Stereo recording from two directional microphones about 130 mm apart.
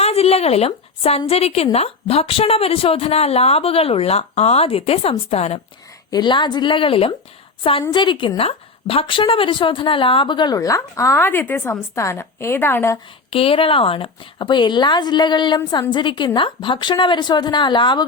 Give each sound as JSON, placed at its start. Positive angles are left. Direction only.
{"t": 0.0, "sound": "a woman's voice", "side_deg": 50}
{"t": 6.1, "sound": "a woman's voice", "side_deg": 35}
{"t": 13.3, "sound": "a woman's voice", "side_deg": 45}